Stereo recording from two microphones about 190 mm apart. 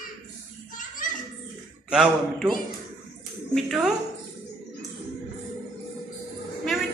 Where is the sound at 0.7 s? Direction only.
45° left (ahead or behind).